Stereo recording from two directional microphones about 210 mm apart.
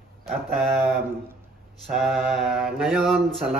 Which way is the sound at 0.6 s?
Centre (ahead or behind).